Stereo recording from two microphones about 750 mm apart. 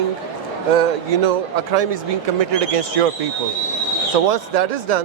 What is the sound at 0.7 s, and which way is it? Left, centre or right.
Speech, right.